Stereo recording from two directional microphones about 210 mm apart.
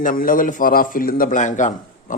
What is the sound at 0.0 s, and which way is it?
A man's voice, 40° left (ahead or behind).